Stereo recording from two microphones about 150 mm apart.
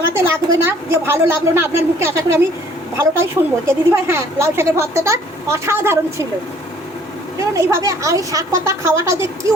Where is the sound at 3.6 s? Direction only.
15° right (ahead or behind).